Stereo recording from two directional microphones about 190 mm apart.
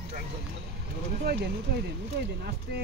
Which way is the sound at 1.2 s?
55° right (ahead or behind).